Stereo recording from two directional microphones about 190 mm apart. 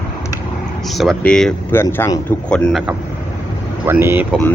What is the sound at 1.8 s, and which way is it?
Speech, 15° left (ahead or behind).